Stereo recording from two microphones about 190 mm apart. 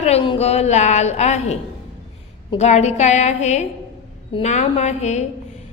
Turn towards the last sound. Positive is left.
turn(degrees=35)  # may be behind; listen again after turning